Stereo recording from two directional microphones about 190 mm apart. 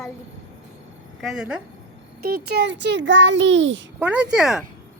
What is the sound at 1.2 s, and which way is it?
Speech, centre (ahead or behind).